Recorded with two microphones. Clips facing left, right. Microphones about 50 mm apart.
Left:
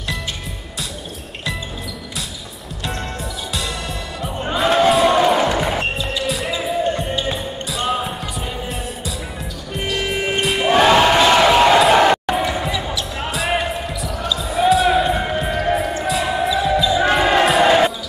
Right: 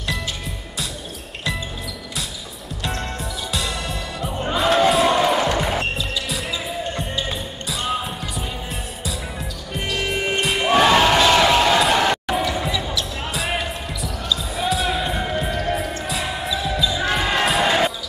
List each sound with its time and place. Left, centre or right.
2.8 s music: centre
4.4 s music: centre
6.2 s basketball bounce: centre
6.6 s music: centre
10.4 s music: centre
10.8 s music: centre
11.9 s a sound: centre
12.3 s basketball bounce: centre
13.3 s basketball bounce: centre
15.1 s music: centre
16.9 s music: left